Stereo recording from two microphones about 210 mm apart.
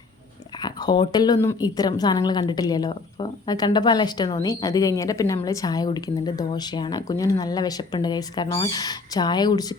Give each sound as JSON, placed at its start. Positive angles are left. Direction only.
{"t": 0.6, "sound": "speech", "side_deg": 20}